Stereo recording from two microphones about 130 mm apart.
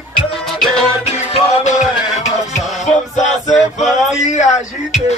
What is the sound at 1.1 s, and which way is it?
Music, 60° left (ahead or behind).